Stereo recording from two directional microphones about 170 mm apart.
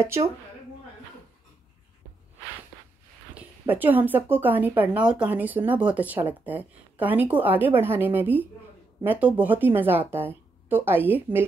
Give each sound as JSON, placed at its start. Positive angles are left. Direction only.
{"t": 0.0, "sound": "speech", "side_deg": -15}
{"t": 3.3, "sound": "speech", "side_deg": -10}